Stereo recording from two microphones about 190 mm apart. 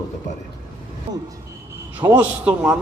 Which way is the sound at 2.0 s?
5° right (ahead or behind).